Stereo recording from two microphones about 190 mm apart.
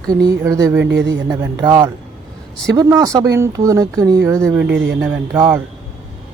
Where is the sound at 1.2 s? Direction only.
20° right (ahead or behind).